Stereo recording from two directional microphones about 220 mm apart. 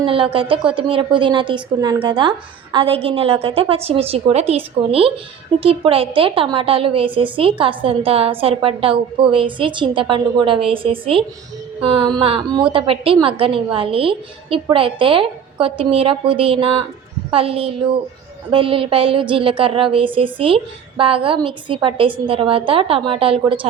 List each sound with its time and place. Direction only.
0.0 s a woman's voice: 25° right (ahead or behind)